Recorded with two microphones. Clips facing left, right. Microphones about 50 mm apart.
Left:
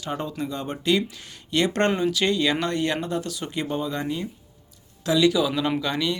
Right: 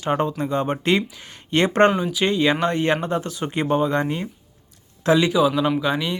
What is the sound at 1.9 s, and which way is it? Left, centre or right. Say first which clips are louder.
Speech: right 2 dB; centre.